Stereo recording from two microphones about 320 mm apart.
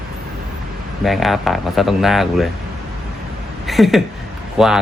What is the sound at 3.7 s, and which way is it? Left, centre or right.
Speech, centre.